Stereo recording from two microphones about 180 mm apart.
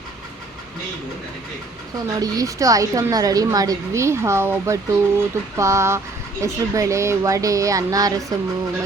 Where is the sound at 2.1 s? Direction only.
20° right (ahead or behind).